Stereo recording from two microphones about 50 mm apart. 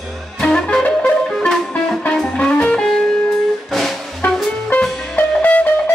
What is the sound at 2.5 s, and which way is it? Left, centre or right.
Music, left.